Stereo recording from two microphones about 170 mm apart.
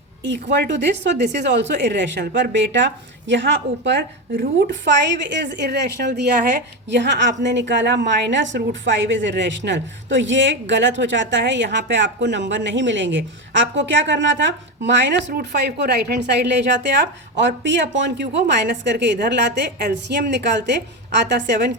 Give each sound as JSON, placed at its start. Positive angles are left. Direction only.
{"t": 0.2, "sound": "a woman's voice", "side_deg": -90}
{"t": 6.9, "sound": "a woman's voice", "side_deg": -90}